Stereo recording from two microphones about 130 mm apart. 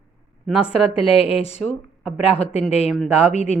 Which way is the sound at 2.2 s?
50° left (ahead or behind).